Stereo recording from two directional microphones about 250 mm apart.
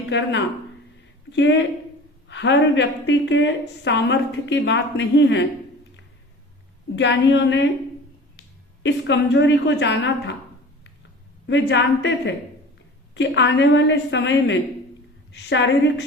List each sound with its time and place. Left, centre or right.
0.1 s a woman's voice: left
6.9 s a woman's voice: left
8.8 s a woman's voice: left
11.4 s a woman's voice: left